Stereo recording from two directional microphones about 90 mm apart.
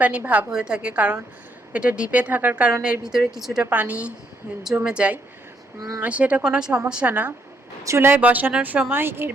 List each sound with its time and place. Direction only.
0.2 s speech: 20° right (ahead or behind)
0.5 s a woman's voice: 10° right (ahead or behind)
3.7 s speech: 15° right (ahead or behind)
7.1 s speech: 20° right (ahead or behind)